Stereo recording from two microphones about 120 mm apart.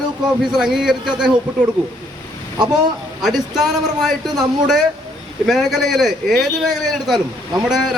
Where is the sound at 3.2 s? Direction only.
5° right (ahead or behind).